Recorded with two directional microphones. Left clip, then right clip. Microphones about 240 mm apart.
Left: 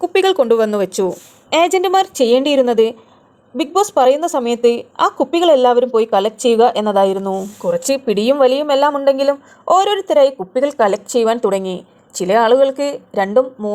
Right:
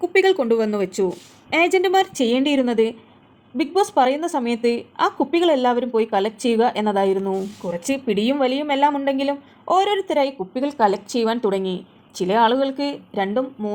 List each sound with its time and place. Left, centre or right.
0.0 s a woman's voice: left